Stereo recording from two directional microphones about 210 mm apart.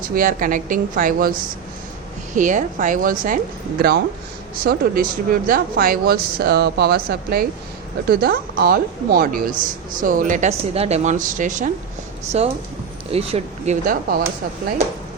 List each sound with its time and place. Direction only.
0.1 s a woman's voice: 40° right (ahead or behind)
2.3 s a woman's voice: 35° right (ahead or behind)
13.8 s a woman's voice: 45° right (ahead or behind)